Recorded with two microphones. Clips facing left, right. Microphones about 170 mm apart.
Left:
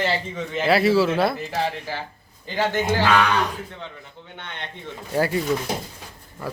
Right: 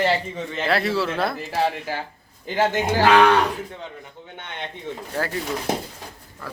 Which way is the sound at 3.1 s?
60° right (ahead or behind).